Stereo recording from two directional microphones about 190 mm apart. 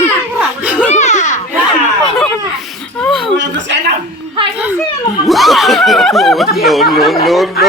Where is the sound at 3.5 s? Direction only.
70° right (ahead or behind).